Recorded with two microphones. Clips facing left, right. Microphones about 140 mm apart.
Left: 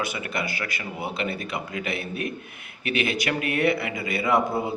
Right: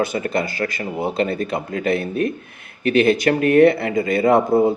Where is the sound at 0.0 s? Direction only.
45° right (ahead or behind).